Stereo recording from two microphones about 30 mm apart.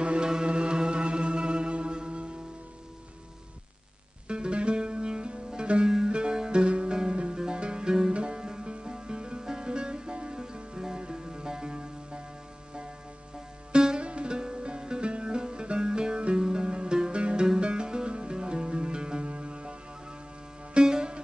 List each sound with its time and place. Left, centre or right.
0.0 s music: right
4.3 s music: right
5.9 s music: centre
6.5 s music: right
13.7 s music: right
20.8 s music: right